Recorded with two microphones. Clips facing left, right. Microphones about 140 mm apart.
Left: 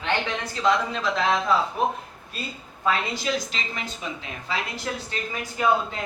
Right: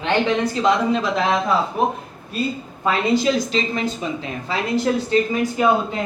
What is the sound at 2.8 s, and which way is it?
A woman's voice, 25° right (ahead or behind).